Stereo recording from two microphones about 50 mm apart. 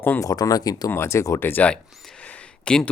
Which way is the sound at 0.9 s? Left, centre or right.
Left.